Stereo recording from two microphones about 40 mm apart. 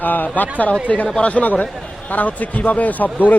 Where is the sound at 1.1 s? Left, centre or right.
Left.